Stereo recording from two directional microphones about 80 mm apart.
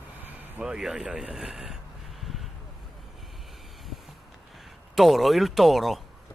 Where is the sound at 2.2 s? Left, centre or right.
Centre.